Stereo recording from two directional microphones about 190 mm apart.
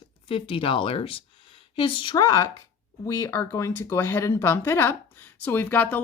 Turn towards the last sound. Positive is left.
turn(degrees=10)  # may be behind; listen again after turning